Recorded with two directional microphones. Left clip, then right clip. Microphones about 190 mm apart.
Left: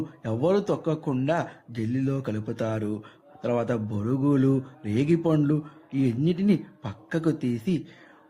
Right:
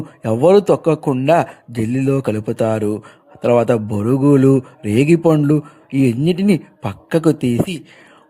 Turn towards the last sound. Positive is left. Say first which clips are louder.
# right 10 dB
turn(degrees=-40)  # may be behind; listen again after turning